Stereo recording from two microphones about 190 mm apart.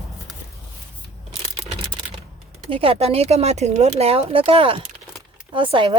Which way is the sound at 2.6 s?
30° right (ahead or behind).